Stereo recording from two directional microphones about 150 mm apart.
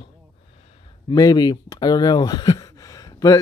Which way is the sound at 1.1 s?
25° left (ahead or behind).